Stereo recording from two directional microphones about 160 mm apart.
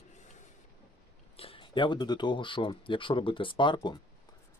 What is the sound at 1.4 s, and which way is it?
Speech, 35° left (ahead or behind).